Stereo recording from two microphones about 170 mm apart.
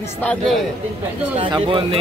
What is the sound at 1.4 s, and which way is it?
Speech, 30° right (ahead or behind).